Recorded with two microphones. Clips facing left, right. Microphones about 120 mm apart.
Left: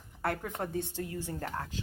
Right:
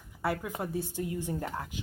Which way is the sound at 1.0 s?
20° right (ahead or behind).